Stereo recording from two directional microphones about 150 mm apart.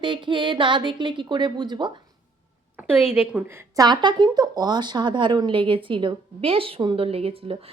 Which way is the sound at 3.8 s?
30° right (ahead or behind).